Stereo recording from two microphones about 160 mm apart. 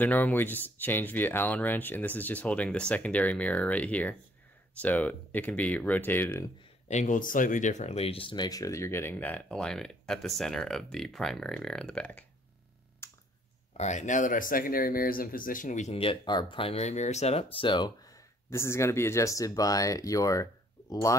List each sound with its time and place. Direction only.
0.0 s speech: 10° left (ahead or behind)
6.9 s speech: 50° left (ahead or behind); by 12.3 s 5° left (ahead or behind)
13.0 s a sound: 15° left (ahead or behind)
13.7 s speech: 50° left (ahead or behind)
16.0 s speech: 30° left (ahead or behind)